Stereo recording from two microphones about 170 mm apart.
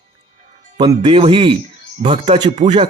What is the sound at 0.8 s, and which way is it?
Speech, 30° right (ahead or behind).